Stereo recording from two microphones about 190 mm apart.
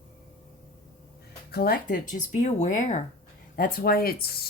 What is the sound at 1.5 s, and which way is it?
A woman's voice, 55° left (ahead or behind).